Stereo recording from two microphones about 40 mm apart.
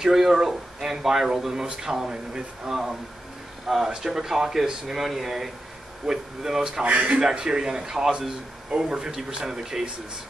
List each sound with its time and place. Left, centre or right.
0.0 s speech: centre
6.8 s a man's voice: right
7.2 s speech: centre